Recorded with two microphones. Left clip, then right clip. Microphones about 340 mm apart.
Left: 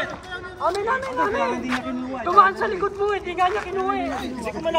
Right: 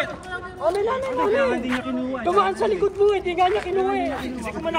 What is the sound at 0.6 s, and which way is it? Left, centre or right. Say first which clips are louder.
Speech: right 1 dB; right.